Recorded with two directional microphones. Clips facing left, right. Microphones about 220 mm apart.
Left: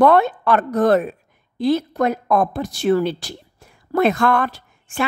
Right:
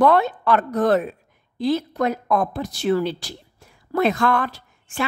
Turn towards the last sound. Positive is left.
turn(degrees=55)  # may be behind; listen again after turning